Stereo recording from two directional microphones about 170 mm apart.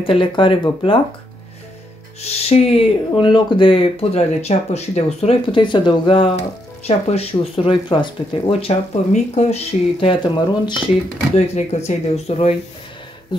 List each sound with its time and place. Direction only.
0.0 s speech: 30° left (ahead or behind)
2.2 s speech: 40° left (ahead or behind)
11.3 s speech: 40° left (ahead or behind)